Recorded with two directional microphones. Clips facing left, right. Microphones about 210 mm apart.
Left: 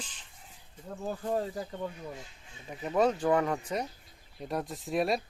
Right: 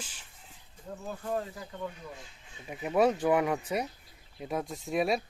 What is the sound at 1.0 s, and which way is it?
Speech, 35° left (ahead or behind).